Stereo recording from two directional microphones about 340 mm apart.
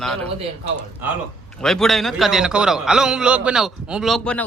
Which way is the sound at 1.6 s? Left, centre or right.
Centre.